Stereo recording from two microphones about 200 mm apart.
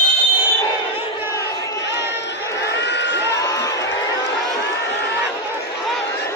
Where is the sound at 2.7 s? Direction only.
60° left (ahead or behind).